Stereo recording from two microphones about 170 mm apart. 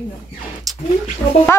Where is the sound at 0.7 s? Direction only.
Centre (ahead or behind).